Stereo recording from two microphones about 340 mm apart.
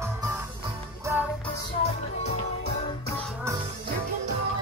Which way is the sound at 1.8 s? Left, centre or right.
Centre.